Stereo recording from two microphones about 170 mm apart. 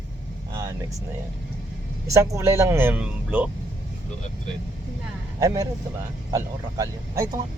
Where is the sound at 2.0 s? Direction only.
20° right (ahead or behind).